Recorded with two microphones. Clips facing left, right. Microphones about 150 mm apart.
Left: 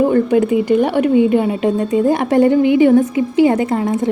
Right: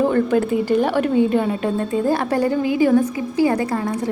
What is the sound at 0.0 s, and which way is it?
A woman's voice, 15° left (ahead or behind).